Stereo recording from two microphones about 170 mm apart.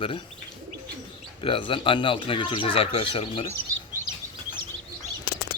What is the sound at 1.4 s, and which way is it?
Speech, 30° left (ahead or behind).